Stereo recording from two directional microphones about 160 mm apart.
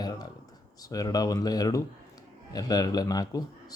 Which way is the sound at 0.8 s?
20° left (ahead or behind).